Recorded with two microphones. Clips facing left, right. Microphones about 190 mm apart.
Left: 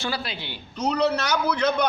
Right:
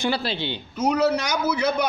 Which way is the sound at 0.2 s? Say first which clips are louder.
Right 7 dB; 30° right (ahead or behind).